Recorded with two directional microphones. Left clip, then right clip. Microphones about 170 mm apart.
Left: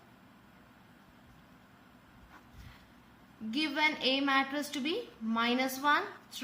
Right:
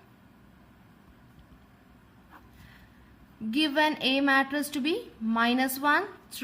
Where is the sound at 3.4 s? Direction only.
55° right (ahead or behind).